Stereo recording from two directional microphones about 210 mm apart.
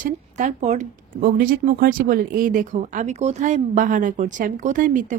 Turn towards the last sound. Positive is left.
turn(degrees=-40)  # may be behind; listen again after turning